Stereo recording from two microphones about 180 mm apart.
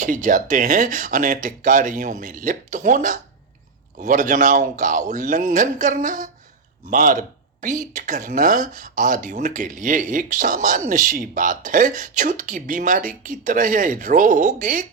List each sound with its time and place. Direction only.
0.0 s speech: 45° right (ahead or behind)